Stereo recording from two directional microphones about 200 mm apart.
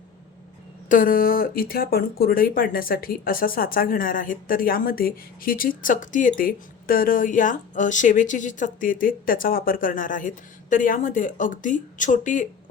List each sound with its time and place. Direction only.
0.9 s speech: 45° left (ahead or behind)